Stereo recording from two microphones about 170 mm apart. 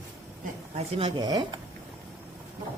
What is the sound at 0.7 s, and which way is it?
Speech, 30° right (ahead or behind).